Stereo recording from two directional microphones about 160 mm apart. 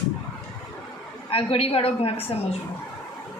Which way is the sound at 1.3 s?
35° left (ahead or behind).